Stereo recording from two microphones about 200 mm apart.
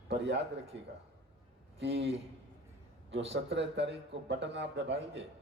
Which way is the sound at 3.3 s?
65° right (ahead or behind).